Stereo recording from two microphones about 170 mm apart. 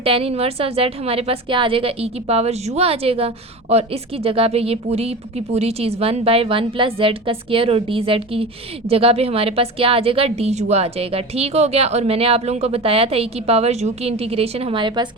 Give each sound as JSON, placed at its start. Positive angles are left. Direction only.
{"t": 0.0, "sound": "a woman's voice", "side_deg": -35}